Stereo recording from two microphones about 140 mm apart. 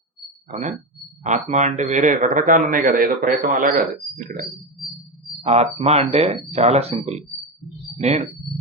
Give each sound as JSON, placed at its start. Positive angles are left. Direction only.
{"t": 1.2, "sound": "a man's voice", "side_deg": -60}
{"t": 5.4, "sound": "speech", "side_deg": -50}